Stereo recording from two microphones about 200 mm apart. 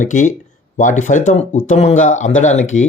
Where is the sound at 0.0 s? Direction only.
40° left (ahead or behind).